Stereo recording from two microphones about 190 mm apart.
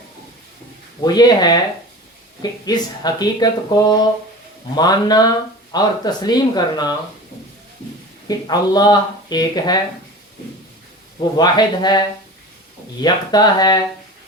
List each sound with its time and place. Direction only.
1.0 s speech: 20° left (ahead or behind)
8.3 s speech: 20° left (ahead or behind)
11.3 s speech: 20° left (ahead or behind)
13.0 s speech: 20° left (ahead or behind)